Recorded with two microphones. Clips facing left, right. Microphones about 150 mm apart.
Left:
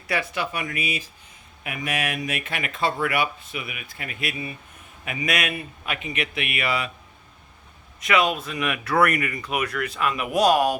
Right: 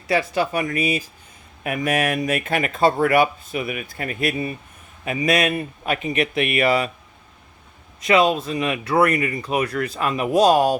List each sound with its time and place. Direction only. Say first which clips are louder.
0.1 s speech: right 6 dB; 35° right (ahead or behind)
8.0 s speech: right 5 dB; 30° right (ahead or behind)